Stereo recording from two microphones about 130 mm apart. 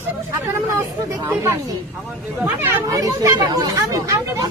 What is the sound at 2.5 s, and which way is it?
Speech, 15° right (ahead or behind).